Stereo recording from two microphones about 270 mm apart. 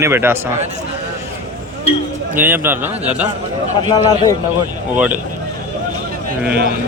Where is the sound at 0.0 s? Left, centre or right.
Centre.